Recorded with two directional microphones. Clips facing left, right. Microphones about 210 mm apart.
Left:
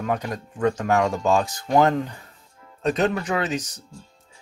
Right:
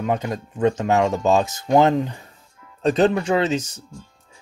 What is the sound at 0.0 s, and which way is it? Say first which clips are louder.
Speech: right 3 dB; 20° right (ahead or behind).